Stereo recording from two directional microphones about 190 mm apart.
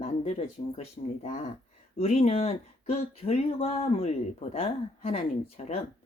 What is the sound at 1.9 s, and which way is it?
Speech, 35° left (ahead or behind).